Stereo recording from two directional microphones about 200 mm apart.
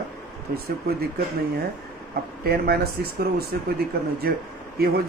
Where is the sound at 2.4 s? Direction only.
50° right (ahead or behind).